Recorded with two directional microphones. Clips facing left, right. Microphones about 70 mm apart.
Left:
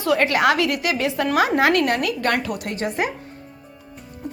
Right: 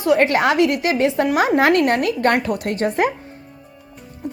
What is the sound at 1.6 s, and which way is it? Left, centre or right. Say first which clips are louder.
Speech: right 3 dB; right.